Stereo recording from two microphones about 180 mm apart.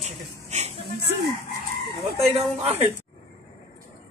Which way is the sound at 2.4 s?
35° right (ahead or behind).